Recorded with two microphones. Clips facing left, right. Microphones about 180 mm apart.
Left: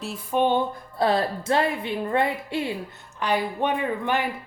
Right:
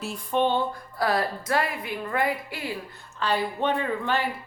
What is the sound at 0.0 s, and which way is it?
A woman's voice, 5° left (ahead or behind).